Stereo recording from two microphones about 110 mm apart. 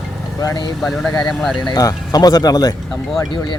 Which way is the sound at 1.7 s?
35° left (ahead or behind).